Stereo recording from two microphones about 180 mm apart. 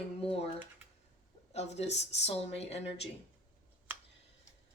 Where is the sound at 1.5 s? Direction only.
35° left (ahead or behind).